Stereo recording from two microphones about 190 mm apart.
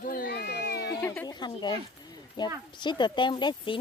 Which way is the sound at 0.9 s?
10° left (ahead or behind).